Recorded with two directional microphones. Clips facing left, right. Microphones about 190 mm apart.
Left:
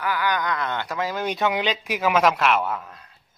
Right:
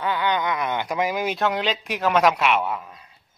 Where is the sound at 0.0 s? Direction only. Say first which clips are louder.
Right 1 dB; 25° right (ahead or behind).